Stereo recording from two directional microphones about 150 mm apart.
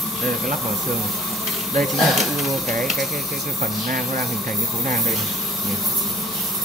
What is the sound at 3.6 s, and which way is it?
Speech, 60° right (ahead or behind).